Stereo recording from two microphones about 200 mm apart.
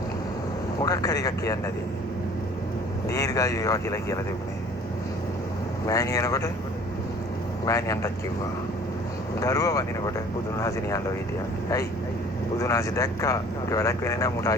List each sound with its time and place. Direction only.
0.8 s speech: 20° left (ahead or behind)
3.1 s speech: 15° left (ahead or behind)
5.8 s speech: 15° left (ahead or behind)
7.6 s speech: 15° left (ahead or behind)
9.4 s speech: 15° left (ahead or behind)
12.5 s speech: 15° left (ahead or behind)